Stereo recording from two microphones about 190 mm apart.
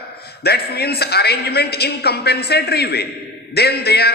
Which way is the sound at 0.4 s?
55° left (ahead or behind).